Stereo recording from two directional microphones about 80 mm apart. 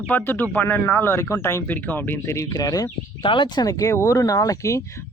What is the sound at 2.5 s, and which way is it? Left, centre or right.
Speech, left.